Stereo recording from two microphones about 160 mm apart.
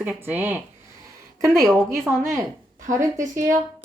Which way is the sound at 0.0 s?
10° right (ahead or behind).